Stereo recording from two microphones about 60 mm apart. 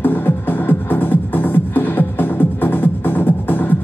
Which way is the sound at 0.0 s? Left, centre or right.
Left.